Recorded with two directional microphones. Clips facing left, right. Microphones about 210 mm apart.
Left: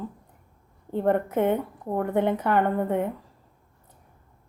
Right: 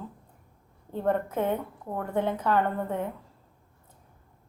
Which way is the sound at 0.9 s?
20° left (ahead or behind).